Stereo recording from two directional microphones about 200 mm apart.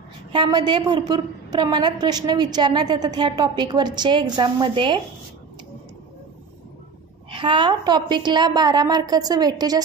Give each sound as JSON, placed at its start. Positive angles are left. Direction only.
{"t": 0.3, "sound": "a woman's voice", "side_deg": -25}
{"t": 7.2, "sound": "a woman's voice", "side_deg": -25}